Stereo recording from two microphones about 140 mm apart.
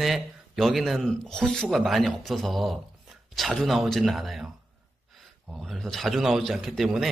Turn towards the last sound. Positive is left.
turn(degrees=0)  # may be behind; listen again after turning